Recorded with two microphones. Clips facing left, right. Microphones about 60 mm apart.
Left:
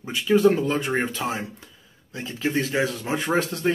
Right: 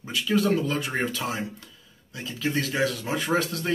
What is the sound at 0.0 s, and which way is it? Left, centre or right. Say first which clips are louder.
Speech: left 6 dB; left.